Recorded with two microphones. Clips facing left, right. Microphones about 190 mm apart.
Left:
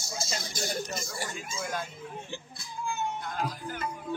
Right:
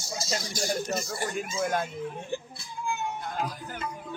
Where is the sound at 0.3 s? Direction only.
50° right (ahead or behind).